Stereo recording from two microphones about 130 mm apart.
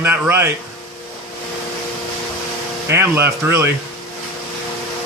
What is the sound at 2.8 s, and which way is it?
Speech, 20° right (ahead or behind).